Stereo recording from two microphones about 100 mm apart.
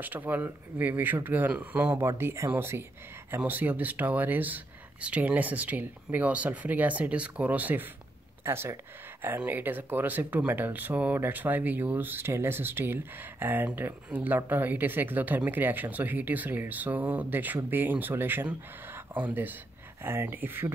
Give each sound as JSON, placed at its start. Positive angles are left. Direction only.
{"t": 0.0, "sound": "speech", "side_deg": -15}